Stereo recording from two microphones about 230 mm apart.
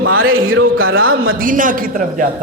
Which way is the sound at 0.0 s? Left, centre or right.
Right.